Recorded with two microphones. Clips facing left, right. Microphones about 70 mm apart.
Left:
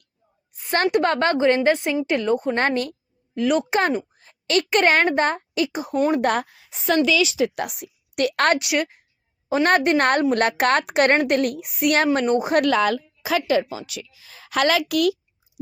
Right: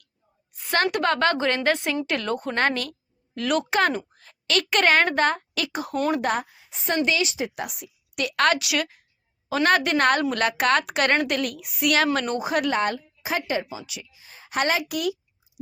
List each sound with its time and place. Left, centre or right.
0.5 s a woman's voice: left
3.3 s a woman's voice: centre
6.2 s a woman's voice: left
12.6 s a woman's voice: left